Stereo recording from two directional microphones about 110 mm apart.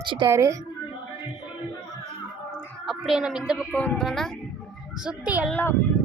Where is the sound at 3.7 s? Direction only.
10° left (ahead or behind).